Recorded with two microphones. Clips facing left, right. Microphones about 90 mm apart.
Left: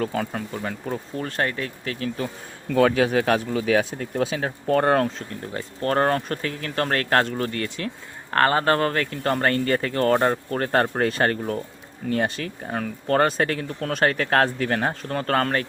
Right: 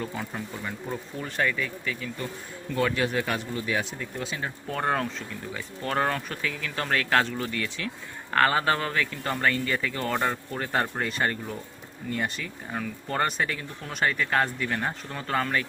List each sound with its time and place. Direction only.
0.0 s speech: 70° left (ahead or behind); by 15.6 s 55° left (ahead or behind)